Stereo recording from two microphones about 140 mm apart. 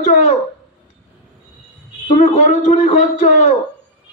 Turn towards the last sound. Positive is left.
turn(degrees=55)  # may be behind; listen again after turning